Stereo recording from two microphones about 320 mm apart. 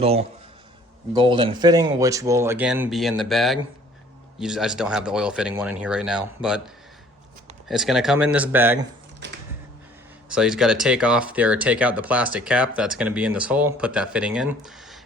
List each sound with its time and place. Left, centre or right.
0.0 s a man's voice: centre
7.7 s speech: centre
10.2 s speech: centre